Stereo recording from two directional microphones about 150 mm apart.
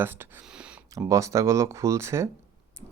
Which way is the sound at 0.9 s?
20° right (ahead or behind).